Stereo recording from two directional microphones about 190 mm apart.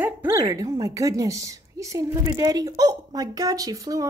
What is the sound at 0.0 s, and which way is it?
A woman's voice, 15° right (ahead or behind).